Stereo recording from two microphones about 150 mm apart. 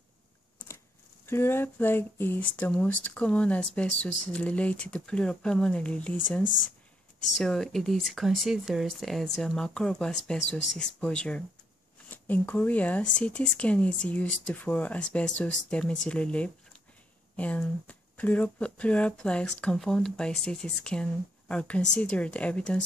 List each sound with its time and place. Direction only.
1.2 s speech: 15° left (ahead or behind)
6.4 s speech: 60° left (ahead or behind)
7.3 s speech: 5° left (ahead or behind)